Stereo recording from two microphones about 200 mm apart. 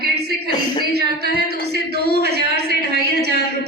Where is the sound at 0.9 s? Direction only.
50° right (ahead or behind).